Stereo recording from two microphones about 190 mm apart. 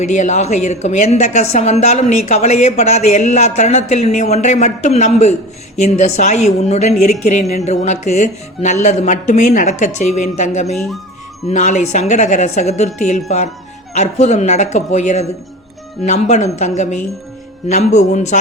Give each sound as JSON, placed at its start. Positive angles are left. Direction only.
{"t": 0.0, "sound": "a woman's voice", "side_deg": 40}